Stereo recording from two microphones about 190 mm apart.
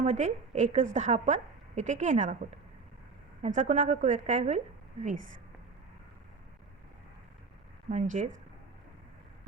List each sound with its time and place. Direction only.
0.0 s a woman's voice: 40° right (ahead or behind)
3.4 s a woman's voice: 40° right (ahead or behind)
7.9 s a woman's voice: 40° right (ahead or behind)